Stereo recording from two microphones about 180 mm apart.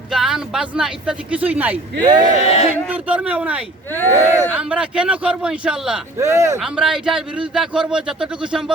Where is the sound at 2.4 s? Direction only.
35° left (ahead or behind).